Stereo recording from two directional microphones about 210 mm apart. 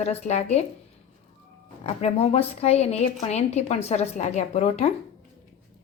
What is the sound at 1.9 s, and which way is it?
A woman's voice, 30° left (ahead or behind).